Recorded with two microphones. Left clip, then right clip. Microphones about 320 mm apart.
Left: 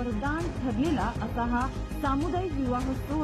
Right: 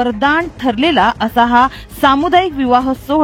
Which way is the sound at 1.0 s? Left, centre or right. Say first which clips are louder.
Right 19 dB; right.